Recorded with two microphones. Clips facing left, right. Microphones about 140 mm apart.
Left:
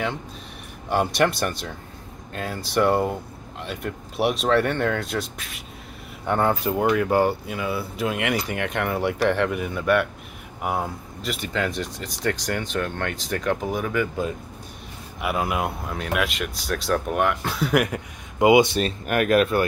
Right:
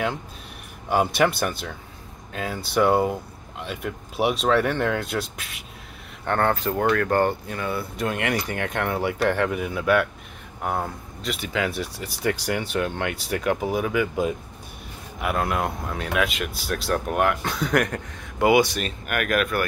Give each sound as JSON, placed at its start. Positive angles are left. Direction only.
{"t": 0.8, "sound": "speech", "side_deg": -5}
{"t": 6.2, "sound": "speech", "side_deg": 10}
{"t": 15.1, "sound": "speech", "side_deg": 5}
{"t": 18.5, "sound": "speech", "side_deg": 25}